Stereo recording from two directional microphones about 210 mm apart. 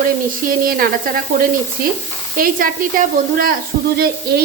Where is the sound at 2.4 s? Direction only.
40° right (ahead or behind).